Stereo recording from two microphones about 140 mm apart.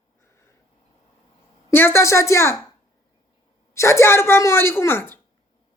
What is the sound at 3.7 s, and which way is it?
A woman's voice, 20° left (ahead or behind).